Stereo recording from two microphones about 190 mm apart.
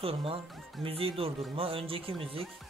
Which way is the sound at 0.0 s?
30° right (ahead or behind).